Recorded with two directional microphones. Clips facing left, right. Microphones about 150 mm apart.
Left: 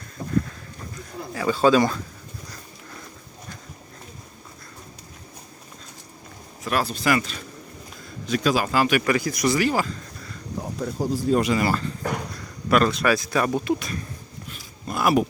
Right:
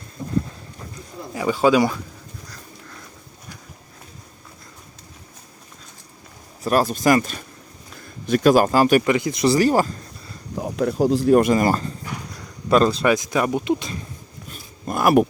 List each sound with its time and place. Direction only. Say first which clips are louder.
1.3 s speech: right 1 dB; 15° right (ahead or behind)
6.6 s speech: right 6 dB; 40° right (ahead or behind)
9.0 s speech: right 3 dB; 20° right (ahead or behind); by 9.9 s 40° right (ahead or behind)
10.6 s speech: right 8 dB; 90° right
11.3 s speech: right 5 dB; 45° right (ahead or behind)
12.7 s speech: right 3 dB; 30° right (ahead or behind)
14.5 s a sound: right 4 dB; 50° right (ahead or behind)